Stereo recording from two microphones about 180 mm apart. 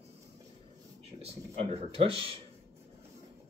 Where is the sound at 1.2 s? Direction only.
35° right (ahead or behind).